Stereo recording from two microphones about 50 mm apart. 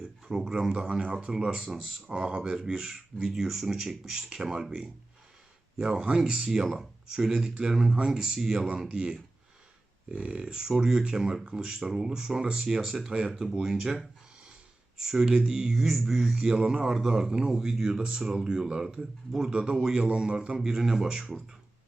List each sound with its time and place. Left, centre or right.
0.3 s a man's voice: centre